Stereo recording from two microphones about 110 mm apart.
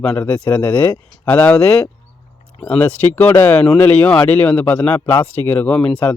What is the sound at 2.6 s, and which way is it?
A man's voice, 10° left (ahead or behind).